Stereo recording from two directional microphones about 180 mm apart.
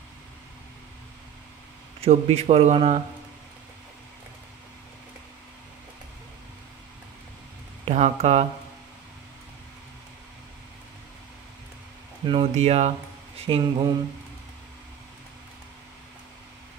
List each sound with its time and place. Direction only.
2.0 s speech: 35° right (ahead or behind)
7.8 s speech: 35° right (ahead or behind)
12.3 s speech: 35° right (ahead or behind)
13.5 s mantra: 25° right (ahead or behind)